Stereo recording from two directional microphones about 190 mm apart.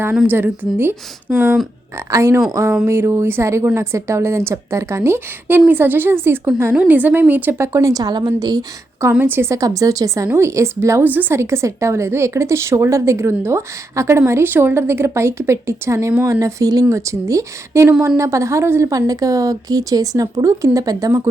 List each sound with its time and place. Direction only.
0.0 s a woman's voice: 5° right (ahead or behind)
2.0 s a woman's voice: 15° right (ahead or behind)